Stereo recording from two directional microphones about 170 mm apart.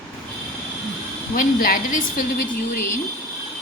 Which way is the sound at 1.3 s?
55° left (ahead or behind).